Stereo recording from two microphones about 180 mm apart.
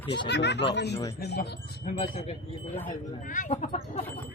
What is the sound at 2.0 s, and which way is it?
Speech, 30° left (ahead or behind).